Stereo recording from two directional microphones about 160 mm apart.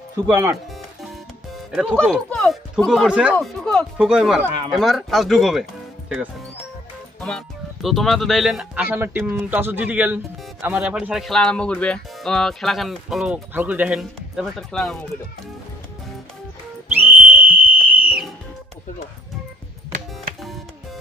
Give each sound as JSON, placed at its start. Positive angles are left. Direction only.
{"t": 0.3, "sound": "speech", "side_deg": -15}
{"t": 1.7, "sound": "speech", "side_deg": -5}
{"t": 8.8, "sound": "speech", "side_deg": -15}
{"t": 16.9, "sound": "whistle", "side_deg": -10}